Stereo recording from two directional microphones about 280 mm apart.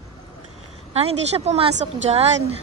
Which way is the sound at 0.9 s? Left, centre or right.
Right.